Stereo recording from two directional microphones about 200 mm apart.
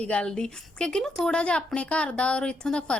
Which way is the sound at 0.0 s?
5° left (ahead or behind).